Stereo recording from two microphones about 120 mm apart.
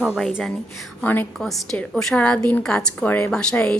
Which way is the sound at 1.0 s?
15° left (ahead or behind).